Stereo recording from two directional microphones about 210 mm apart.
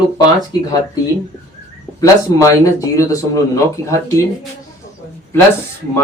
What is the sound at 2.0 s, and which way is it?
Speech, 15° left (ahead or behind).